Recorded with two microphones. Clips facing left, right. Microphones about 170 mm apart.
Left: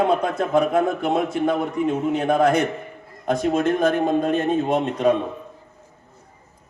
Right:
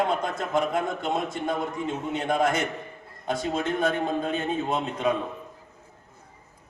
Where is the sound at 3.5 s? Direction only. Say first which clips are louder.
Left 6 dB; 45° left (ahead or behind).